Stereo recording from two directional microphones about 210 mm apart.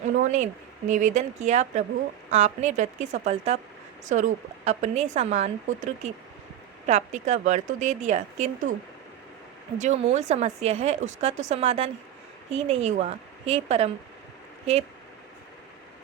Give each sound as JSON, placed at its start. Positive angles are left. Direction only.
{"t": 0.0, "sound": "speech", "side_deg": -35}
{"t": 9.7, "sound": "a woman's voice", "side_deg": -35}